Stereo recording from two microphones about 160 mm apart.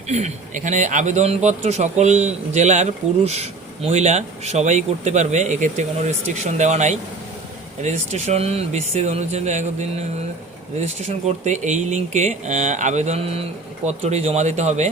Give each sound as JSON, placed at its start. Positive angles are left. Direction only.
{"t": 0.1, "sound": "speech", "side_deg": -45}
{"t": 10.8, "sound": "speech", "side_deg": -45}